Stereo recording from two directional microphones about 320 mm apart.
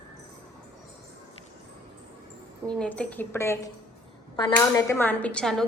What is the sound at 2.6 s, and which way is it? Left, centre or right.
A woman's voice, centre.